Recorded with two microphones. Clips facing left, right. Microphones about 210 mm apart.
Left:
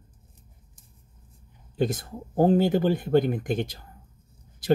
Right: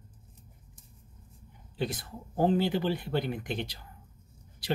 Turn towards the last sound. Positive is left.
turn(degrees=50)  # may be behind; listen again after turning